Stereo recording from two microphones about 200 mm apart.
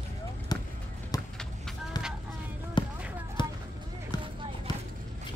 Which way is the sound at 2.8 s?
25° left (ahead or behind).